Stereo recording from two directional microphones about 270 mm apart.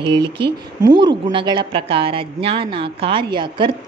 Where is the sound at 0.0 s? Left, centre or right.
Centre.